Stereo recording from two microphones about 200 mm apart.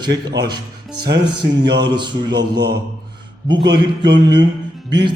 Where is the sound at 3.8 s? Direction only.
25° right (ahead or behind).